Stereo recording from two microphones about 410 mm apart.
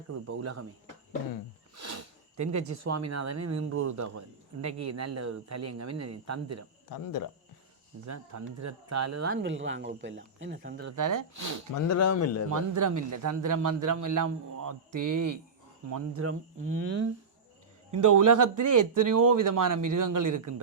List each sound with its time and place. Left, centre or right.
0.1 s speech: right
1.7 s a sound: right
2.4 s a man's voice: right
6.9 s speech: left
8.0 s speech: right
10.8 s a man's voice: right
11.7 s speech: left
12.7 s a man's voice: right
17.9 s a man's voice: right